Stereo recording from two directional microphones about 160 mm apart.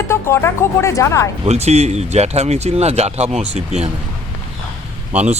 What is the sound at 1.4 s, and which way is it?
Speech, 45° right (ahead or behind).